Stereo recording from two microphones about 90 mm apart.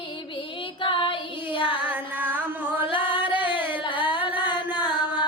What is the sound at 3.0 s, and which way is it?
Singing, 65° left (ahead or behind).